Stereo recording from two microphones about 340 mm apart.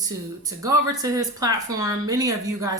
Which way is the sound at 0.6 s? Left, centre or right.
Centre.